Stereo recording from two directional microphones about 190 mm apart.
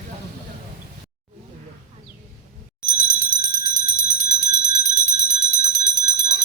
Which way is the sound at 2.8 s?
55° left (ahead or behind).